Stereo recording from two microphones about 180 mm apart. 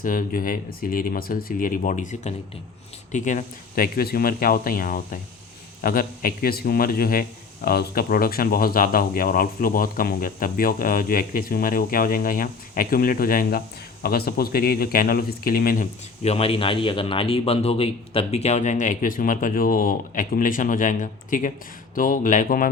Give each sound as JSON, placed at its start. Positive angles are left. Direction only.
{"t": 0.0, "sound": "speech", "side_deg": 50}